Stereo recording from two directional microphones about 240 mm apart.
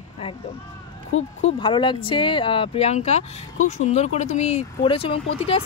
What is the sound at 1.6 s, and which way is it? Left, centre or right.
Speech, centre.